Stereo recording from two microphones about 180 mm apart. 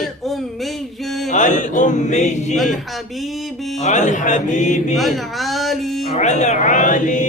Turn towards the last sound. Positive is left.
turn(degrees=45)  # may be behind; listen again after turning